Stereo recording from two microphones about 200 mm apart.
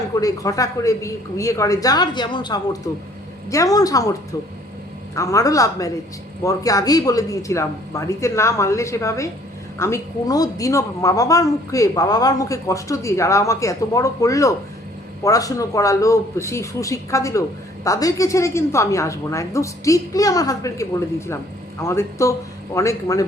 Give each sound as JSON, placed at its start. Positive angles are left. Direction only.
{"t": 0.2, "sound": "speech", "side_deg": 15}
{"t": 5.1, "sound": "speech", "side_deg": 15}